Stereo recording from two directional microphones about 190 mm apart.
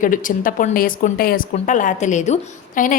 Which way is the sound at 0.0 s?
45° left (ahead or behind).